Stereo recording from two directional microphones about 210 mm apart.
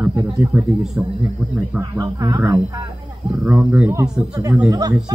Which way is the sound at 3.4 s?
5° right (ahead or behind).